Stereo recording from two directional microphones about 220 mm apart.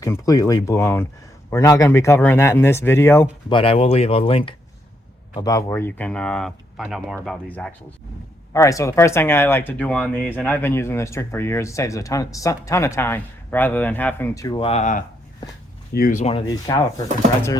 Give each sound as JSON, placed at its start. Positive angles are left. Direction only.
{"t": 0.0, "sound": "speech", "side_deg": 15}
{"t": 3.5, "sound": "speech", "side_deg": 25}
{"t": 8.5, "sound": "speech", "side_deg": 15}
{"t": 16.5, "sound": "speech", "side_deg": 15}